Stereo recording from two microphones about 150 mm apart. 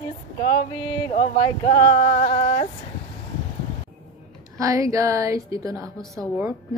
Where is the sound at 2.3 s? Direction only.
40° left (ahead or behind).